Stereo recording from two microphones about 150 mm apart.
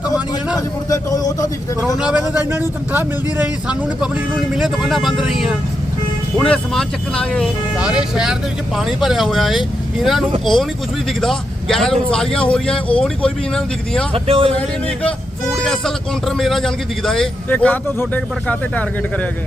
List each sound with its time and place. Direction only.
0.9 s a man's voice: 25° left (ahead or behind)
2.0 s a man's voice: 5° right (ahead or behind)
7.8 s speech: 5° right (ahead or behind)
14.1 s speech: 40° right (ahead or behind)
14.5 s speech: 10° left (ahead or behind)